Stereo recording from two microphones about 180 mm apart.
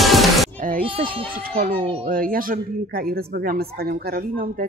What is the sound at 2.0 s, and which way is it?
Speech, 50° right (ahead or behind).